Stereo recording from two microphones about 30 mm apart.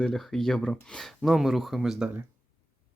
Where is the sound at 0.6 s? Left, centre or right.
Left.